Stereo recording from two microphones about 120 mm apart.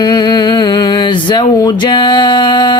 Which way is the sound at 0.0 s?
35° left (ahead or behind).